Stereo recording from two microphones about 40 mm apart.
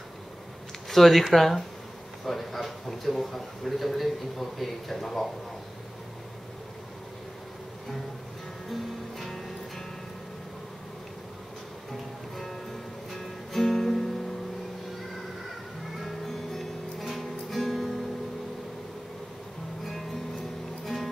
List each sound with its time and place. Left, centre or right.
0.8 s a man's voice: centre
8.7 s music: centre
13.1 s music: centre
16.0 s music: centre
20.8 s music: centre